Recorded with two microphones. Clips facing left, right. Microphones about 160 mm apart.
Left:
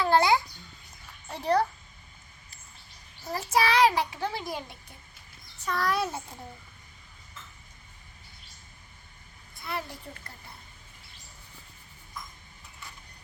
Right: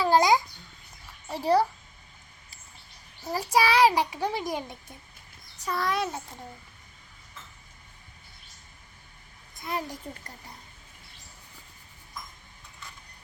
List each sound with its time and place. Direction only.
0.0 s babbling: 15° right (ahead or behind)
1.3 s a child's voice: 10° right (ahead or behind)
3.3 s a child's voice: 10° right (ahead or behind)
5.6 s a child's voice: 5° right (ahead or behind)
9.6 s a child's voice: 40° right (ahead or behind)